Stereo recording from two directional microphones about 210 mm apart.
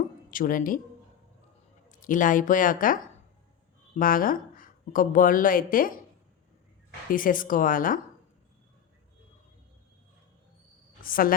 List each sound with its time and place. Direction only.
0.3 s speech: 40° left (ahead or behind)
1.9 s a woman's voice: 40° left (ahead or behind)
7.1 s speech: 40° left (ahead or behind)
11.0 s a woman's voice: 45° left (ahead or behind)